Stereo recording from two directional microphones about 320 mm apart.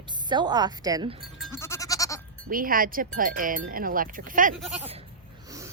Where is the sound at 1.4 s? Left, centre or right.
Centre.